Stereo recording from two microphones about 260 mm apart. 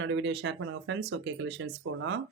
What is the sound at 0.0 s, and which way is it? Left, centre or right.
Speech, right.